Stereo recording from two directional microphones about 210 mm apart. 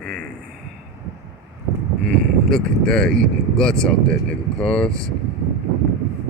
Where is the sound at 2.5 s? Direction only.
5° left (ahead or behind).